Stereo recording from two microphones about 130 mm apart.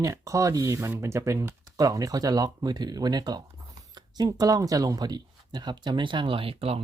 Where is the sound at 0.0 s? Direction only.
25° right (ahead or behind).